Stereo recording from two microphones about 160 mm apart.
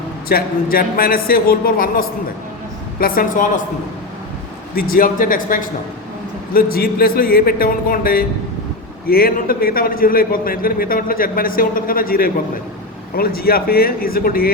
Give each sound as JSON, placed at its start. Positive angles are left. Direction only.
{"t": 0.3, "sound": "a man's voice", "side_deg": 70}
{"t": 4.7, "sound": "a man's voice", "side_deg": 65}